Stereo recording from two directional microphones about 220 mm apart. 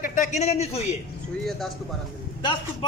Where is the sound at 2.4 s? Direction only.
20° left (ahead or behind).